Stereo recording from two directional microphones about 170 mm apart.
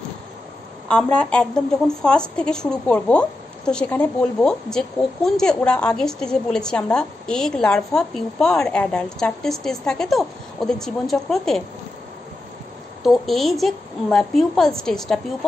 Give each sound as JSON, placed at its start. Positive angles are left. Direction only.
{"t": 1.0, "sound": "speech", "side_deg": 5}
{"t": 13.0, "sound": "speech", "side_deg": 0}